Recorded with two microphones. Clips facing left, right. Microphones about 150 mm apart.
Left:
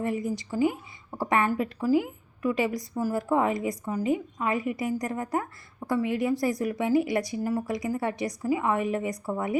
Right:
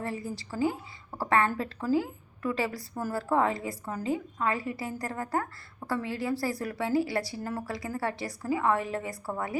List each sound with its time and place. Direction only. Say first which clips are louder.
0.0 s a woman's voice: left 6 dB; 15° left (ahead or behind)